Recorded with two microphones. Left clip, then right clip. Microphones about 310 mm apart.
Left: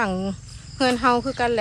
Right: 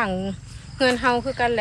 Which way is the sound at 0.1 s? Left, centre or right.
Left.